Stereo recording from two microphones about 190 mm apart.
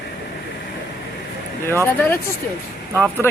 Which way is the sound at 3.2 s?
15° left (ahead or behind).